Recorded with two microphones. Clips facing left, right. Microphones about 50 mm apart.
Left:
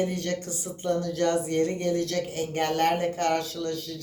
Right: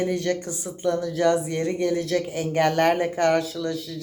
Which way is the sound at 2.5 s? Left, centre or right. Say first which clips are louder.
Right 5 dB; right.